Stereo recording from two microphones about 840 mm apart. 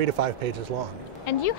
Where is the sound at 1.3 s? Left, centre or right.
Left.